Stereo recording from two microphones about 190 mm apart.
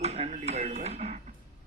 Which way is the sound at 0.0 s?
35° right (ahead or behind).